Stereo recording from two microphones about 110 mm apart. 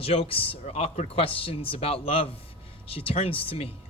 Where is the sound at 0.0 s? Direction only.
60° left (ahead or behind).